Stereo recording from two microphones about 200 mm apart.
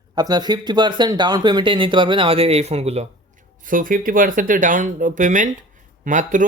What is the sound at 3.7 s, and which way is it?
Speech, 45° right (ahead or behind).